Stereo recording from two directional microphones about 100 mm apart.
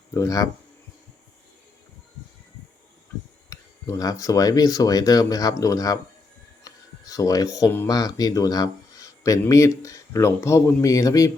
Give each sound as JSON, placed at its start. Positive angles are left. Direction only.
{"t": 0.1, "sound": "speech", "side_deg": 35}
{"t": 3.5, "sound": "speech", "side_deg": 35}
{"t": 6.7, "sound": "music", "side_deg": 35}
{"t": 7.9, "sound": "speech", "side_deg": 40}